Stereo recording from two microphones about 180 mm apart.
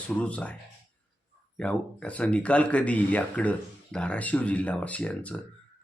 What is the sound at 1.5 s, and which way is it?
Speech, 5° left (ahead or behind).